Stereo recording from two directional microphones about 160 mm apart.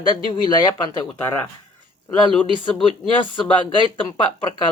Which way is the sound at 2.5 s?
30° left (ahead or behind).